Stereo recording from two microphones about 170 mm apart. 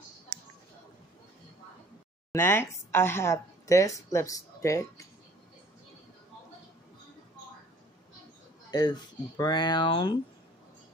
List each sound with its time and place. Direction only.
2.3 s a woman's voice: 15° left (ahead or behind)
8.6 s a sound: 25° left (ahead or behind)
9.4 s speech: 25° left (ahead or behind)